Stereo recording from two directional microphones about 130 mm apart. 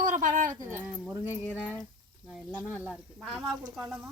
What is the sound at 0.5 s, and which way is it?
Speech, 25° right (ahead or behind).